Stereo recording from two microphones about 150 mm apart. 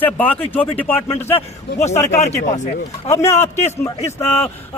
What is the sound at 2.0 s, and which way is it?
Speech, 50° left (ahead or behind).